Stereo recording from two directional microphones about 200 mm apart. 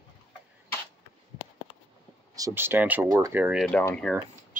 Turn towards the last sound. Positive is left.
turn(degrees=5)  # may be behind; listen again after turning